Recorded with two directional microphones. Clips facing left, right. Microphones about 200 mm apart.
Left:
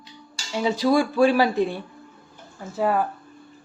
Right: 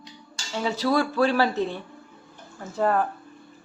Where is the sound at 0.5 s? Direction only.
15° left (ahead or behind).